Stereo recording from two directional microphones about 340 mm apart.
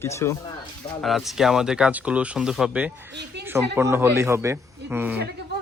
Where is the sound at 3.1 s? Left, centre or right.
Right.